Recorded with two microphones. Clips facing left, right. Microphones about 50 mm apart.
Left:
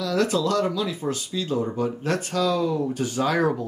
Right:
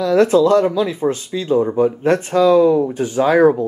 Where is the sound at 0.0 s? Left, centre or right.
Right.